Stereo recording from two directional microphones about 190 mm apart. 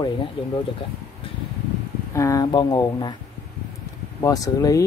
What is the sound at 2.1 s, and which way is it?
Speech, 15° left (ahead or behind).